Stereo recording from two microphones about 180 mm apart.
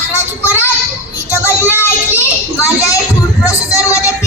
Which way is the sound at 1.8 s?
15° left (ahead or behind).